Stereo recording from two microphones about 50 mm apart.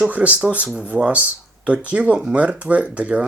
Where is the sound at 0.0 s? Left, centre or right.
Right.